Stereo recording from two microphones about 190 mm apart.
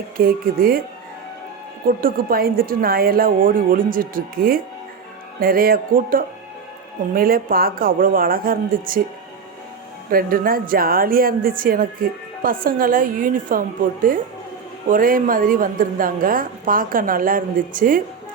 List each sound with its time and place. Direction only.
0.2 s a woman's voice: 50° right (ahead or behind)
1.9 s a woman's voice: 50° right (ahead or behind)
10.1 s a woman's voice: 50° right (ahead or behind)